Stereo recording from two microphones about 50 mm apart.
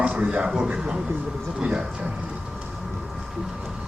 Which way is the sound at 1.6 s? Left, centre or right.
Right.